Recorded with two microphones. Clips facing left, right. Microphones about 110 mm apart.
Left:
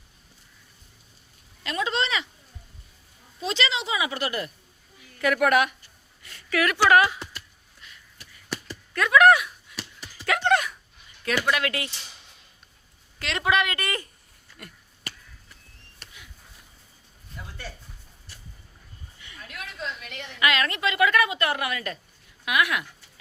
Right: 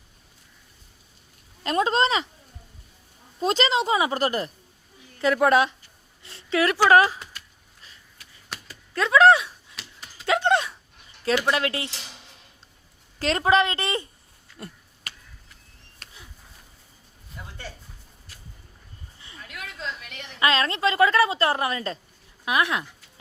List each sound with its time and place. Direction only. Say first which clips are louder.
1.6 s a woman's voice: right 6 dB; 40° right (ahead or behind)
3.4 s a woman's voice: right 6 dB; 45° right (ahead or behind)
5.2 s speech: right 2 dB; 25° right (ahead or behind)
8.9 s speech: right 1 dB; 25° right (ahead or behind)
10.2 s dog: right 1 dB; 25° right (ahead or behind)
11.3 s speech: right 2 dB; 25° right (ahead or behind)
13.1 s a woman's voice: right 4 dB; 35° right (ahead or behind)
19.2 s a sound: even; 30° right (ahead or behind)
20.4 s a woman's voice: right 2 dB; 30° right (ahead or behind)